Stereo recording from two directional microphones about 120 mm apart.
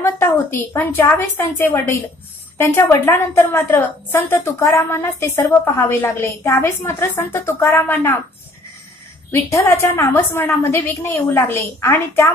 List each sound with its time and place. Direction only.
0.0 s a woman's voice: 20° left (ahead or behind)
9.3 s a woman's voice: 25° left (ahead or behind)